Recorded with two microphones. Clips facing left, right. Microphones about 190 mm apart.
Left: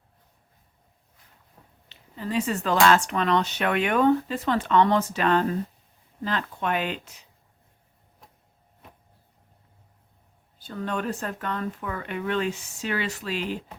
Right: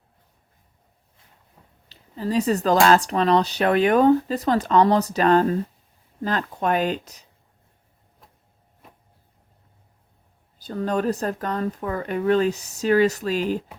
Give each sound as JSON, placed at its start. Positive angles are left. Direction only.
{"t": 1.9, "sound": "speech", "side_deg": -35}
{"t": 10.6, "sound": "speech", "side_deg": -40}